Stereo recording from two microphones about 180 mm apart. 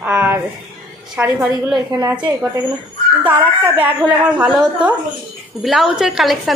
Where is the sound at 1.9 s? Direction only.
20° right (ahead or behind).